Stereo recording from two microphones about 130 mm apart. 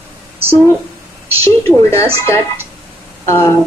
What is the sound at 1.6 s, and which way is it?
Speech, 20° left (ahead or behind).